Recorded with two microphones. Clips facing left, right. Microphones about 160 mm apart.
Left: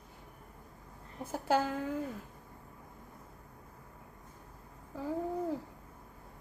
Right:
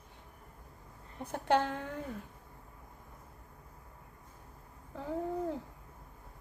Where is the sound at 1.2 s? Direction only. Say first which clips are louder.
Right 1 dB; 5° left (ahead or behind).